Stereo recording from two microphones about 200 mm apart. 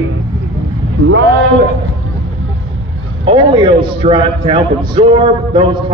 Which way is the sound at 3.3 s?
25° right (ahead or behind).